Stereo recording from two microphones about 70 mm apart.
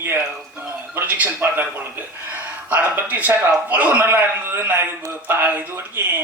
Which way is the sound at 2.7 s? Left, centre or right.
Right.